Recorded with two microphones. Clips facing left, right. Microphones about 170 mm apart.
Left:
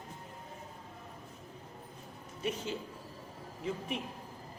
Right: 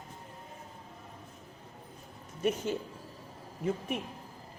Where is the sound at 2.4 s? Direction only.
50° right (ahead or behind).